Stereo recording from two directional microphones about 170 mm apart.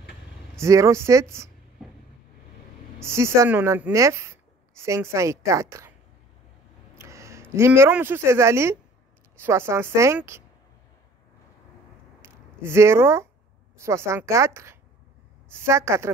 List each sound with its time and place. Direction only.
0.6 s speech: 15° right (ahead or behind)
3.0 s speech: 15° right (ahead or behind)
7.0 s a sound: 15° right (ahead or behind)
7.5 s speech: 15° right (ahead or behind)
12.2 s a sound: 15° right (ahead or behind)
13.7 s speech: 15° right (ahead or behind)